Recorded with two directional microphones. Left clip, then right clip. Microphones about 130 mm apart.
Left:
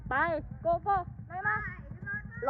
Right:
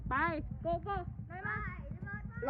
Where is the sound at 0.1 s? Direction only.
40° right (ahead or behind).